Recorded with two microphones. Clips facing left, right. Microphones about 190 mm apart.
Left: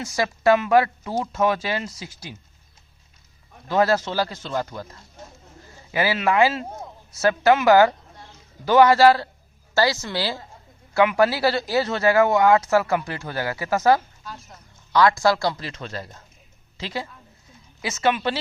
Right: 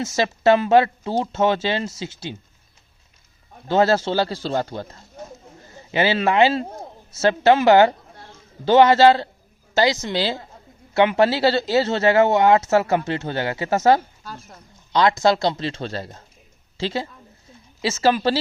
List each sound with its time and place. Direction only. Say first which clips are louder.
0.0 s speech: right 2 dB; 25° right (ahead or behind)
3.7 s a woman's voice: right 3 dB; 30° right (ahead or behind)